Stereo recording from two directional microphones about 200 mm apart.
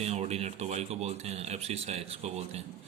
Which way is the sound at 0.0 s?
35° right (ahead or behind).